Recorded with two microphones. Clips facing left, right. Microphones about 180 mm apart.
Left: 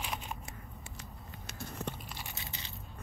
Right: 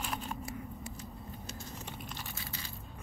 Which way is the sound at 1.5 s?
60° left (ahead or behind).